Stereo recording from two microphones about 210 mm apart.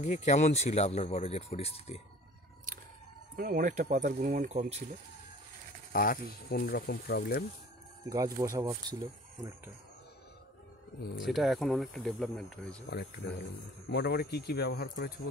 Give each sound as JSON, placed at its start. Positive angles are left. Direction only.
{"t": 0.0, "sound": "speech", "side_deg": 35}
{"t": 3.3, "sound": "speech", "side_deg": -40}
{"t": 5.9, "sound": "speech", "side_deg": 40}
{"t": 8.1, "sound": "speech", "side_deg": -15}
{"t": 11.2, "sound": "speech", "side_deg": 0}
{"t": 12.9, "sound": "speech", "side_deg": 50}